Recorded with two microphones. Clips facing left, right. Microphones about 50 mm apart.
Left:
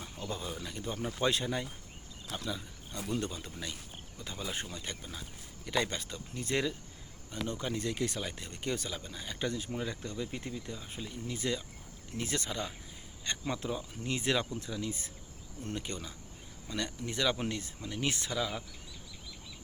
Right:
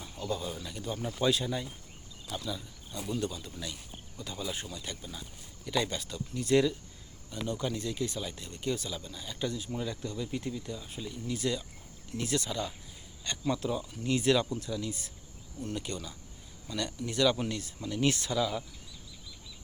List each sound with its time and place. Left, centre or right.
0.0 s a sound: left
0.5 s speech: centre
0.8 s speech: left
7.8 s speech: left
8.3 s speech: left